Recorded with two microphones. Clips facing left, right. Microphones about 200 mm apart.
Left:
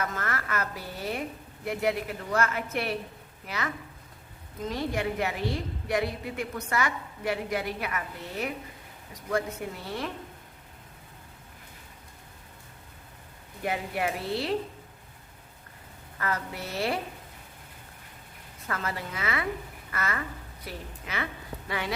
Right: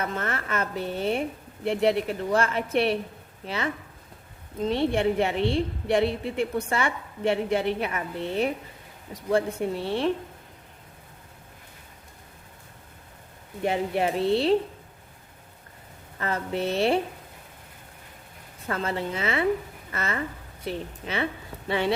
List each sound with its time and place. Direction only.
0.0 s a woman's voice: 30° right (ahead or behind)
13.6 s a woman's voice: 25° right (ahead or behind)
16.1 s a woman's voice: 25° right (ahead or behind)
18.7 s a woman's voice: 25° right (ahead or behind)